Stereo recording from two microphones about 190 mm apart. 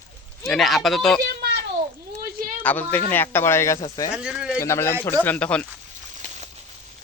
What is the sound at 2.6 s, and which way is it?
Speech, 10° left (ahead or behind).